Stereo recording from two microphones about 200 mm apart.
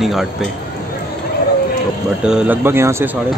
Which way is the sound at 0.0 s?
Centre (ahead or behind).